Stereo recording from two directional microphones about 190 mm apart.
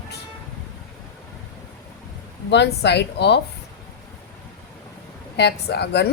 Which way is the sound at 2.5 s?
65° left (ahead or behind).